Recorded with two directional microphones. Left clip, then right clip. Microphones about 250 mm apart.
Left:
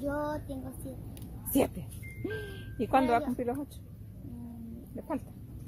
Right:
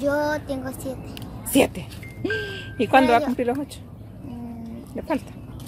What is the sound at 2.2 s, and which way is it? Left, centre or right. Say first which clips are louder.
Speech: right 12 dB; centre.